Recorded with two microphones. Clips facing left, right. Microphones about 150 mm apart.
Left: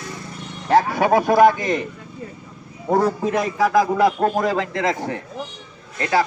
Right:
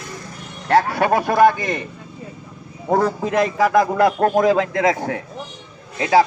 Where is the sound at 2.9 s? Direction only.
Centre (ahead or behind).